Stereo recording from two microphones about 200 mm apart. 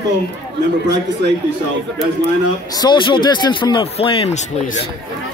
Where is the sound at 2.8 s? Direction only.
25° left (ahead or behind).